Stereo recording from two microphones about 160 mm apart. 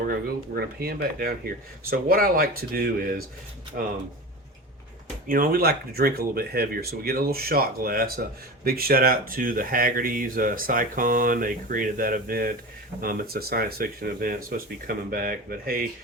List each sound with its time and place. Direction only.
0.0 s speech: 70° right (ahead or behind)
5.3 s speech: 65° right (ahead or behind)